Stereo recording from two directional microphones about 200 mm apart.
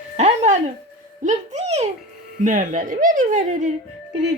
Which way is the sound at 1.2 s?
35° right (ahead or behind).